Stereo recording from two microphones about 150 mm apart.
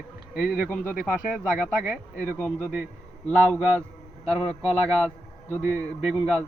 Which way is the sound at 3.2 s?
10° left (ahead or behind).